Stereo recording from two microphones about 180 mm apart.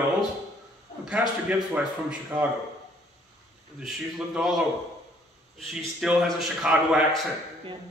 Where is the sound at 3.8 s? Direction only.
Centre (ahead or behind).